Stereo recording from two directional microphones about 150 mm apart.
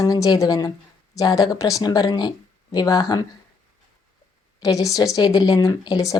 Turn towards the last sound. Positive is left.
turn(degrees=25)  # may be behind; listen again after turning